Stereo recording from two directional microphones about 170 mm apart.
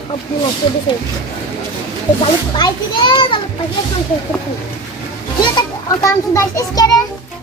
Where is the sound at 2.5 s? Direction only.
25° left (ahead or behind).